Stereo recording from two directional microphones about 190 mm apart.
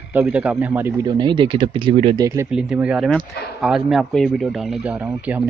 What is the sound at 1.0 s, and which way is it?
Speech, 25° right (ahead or behind).